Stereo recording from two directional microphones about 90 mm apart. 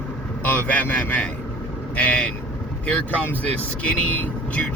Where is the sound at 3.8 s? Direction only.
15° left (ahead or behind).